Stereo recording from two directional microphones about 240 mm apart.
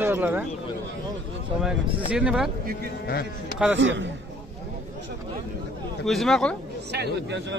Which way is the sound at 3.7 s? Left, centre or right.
Right.